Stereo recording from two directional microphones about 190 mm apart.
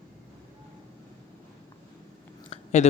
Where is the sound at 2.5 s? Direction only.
35° left (ahead or behind).